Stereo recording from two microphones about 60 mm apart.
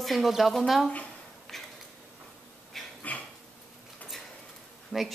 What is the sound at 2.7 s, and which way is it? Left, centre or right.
Dog, centre.